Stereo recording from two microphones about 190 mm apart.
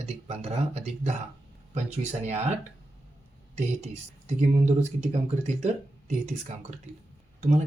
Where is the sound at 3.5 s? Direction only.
35° right (ahead or behind).